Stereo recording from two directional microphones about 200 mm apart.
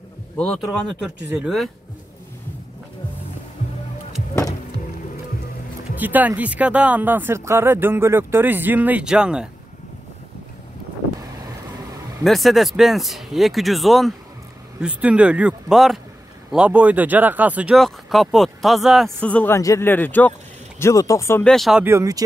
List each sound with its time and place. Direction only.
0.4 s speech: centre (ahead or behind)
5.9 s speech: 10° right (ahead or behind)
12.2 s speech: centre (ahead or behind)
21.5 s speech: centre (ahead or behind)
21.8 s speech: 15° right (ahead or behind)